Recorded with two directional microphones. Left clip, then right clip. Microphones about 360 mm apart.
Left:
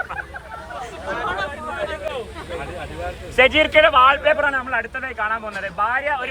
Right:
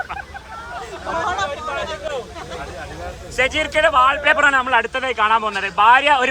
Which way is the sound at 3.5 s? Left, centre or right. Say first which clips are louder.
Left 4 dB; centre.